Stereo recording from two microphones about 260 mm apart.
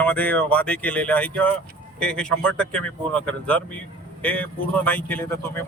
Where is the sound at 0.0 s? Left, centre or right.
Centre.